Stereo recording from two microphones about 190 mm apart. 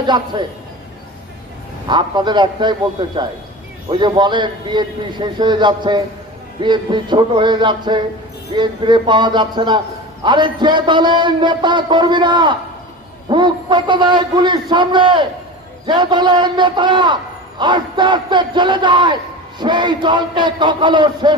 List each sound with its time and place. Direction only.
0.0 s a man's voice: 25° right (ahead or behind)
1.9 s a man's voice: 25° right (ahead or behind)